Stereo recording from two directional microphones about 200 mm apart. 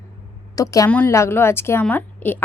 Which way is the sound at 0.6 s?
15° left (ahead or behind).